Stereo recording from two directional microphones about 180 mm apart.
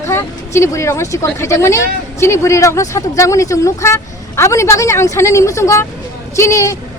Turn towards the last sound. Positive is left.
turn(degrees=15)  # may be behind; listen again after turning